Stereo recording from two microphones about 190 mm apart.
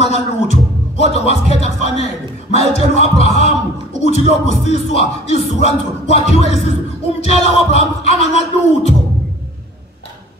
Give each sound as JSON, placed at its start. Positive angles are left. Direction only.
{"t": 0.0, "sound": "speech", "side_deg": 35}